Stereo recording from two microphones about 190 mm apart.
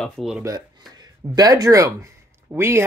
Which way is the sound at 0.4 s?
15° right (ahead or behind).